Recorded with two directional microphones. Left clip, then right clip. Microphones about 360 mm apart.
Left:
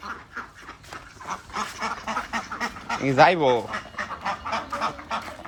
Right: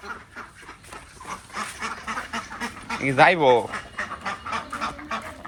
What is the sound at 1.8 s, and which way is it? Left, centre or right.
Duck, centre.